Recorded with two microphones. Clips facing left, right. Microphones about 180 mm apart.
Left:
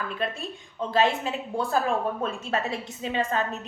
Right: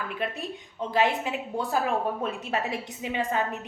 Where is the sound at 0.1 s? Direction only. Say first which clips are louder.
Left 1 dB; 15° right (ahead or behind).